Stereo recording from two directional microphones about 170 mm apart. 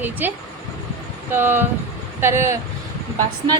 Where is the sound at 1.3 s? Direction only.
10° right (ahead or behind).